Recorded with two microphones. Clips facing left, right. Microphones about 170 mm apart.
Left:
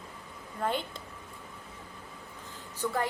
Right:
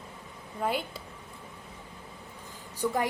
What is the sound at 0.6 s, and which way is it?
Speech, 5° right (ahead or behind).